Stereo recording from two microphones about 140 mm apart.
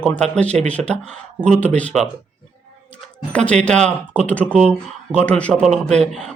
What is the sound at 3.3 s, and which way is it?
Speech, 10° left (ahead or behind).